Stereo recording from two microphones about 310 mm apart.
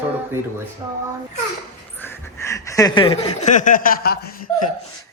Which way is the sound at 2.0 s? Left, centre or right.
Centre.